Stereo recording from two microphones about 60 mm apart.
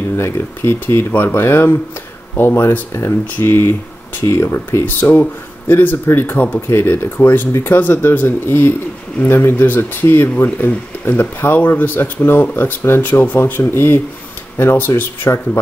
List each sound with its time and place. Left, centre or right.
0.2 s speech: left
6.3 s speech: left
6.7 s speech: left